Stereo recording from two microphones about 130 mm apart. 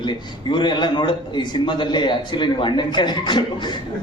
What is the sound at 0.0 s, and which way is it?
A man's voice, 35° left (ahead or behind).